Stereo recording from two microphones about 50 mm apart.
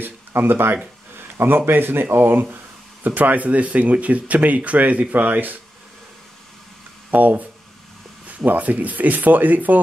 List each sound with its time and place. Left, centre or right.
0.0 s speech: right
1.1 s a sound: right
1.7 s a man's voice: right
3.1 s speech: right
7.1 s speech: right